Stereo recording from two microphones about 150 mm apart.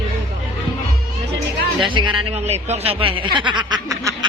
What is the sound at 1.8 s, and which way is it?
Speech, 35° right (ahead or behind).